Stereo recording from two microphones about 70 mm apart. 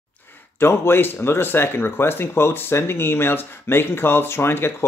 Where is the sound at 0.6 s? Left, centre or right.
Left.